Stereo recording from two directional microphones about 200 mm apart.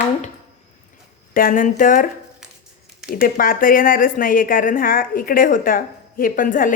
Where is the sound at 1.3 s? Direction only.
45° left (ahead or behind).